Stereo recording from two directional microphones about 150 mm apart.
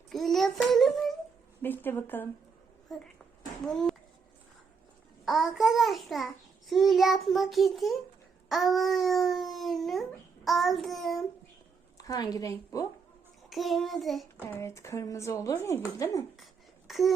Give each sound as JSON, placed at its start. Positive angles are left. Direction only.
{"t": 0.1, "sound": "child singing", "side_deg": 0}
{"t": 1.6, "sound": "speech", "side_deg": 15}
{"t": 2.9, "sound": "speech", "side_deg": 5}
{"t": 5.2, "sound": "speech", "side_deg": 0}
{"t": 11.9, "sound": "speech", "side_deg": 25}
{"t": 13.5, "sound": "speech", "side_deg": 0}
{"t": 14.4, "sound": "speech", "side_deg": 20}
{"t": 16.4, "sound": "a sound", "side_deg": 0}